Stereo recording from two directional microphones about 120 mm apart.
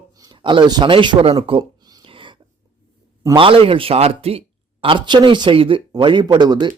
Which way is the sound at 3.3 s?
45° right (ahead or behind).